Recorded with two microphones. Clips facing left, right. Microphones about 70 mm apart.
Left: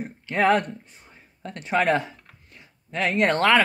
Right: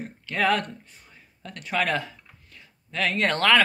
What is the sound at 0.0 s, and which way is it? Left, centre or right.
Speech, left.